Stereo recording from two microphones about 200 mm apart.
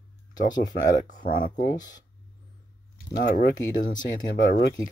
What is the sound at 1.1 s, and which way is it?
Speech, 45° left (ahead or behind).